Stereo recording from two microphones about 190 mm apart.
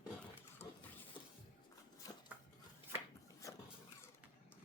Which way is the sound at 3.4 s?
15° left (ahead or behind).